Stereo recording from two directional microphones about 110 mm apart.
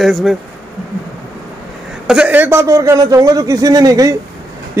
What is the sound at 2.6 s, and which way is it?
A man's voice, 30° right (ahead or behind).